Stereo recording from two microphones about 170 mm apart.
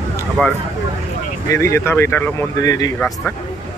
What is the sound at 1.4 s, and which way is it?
Speech, 15° left (ahead or behind).